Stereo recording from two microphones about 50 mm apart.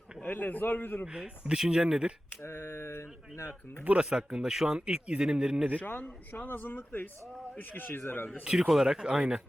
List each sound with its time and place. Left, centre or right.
0.3 s speech: left
1.0 s speech: centre
2.4 s speech: left
4.0 s speech: centre
5.8 s speech: left
8.4 s speech: centre